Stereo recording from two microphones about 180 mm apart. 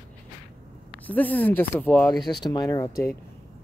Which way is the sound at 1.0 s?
10° left (ahead or behind).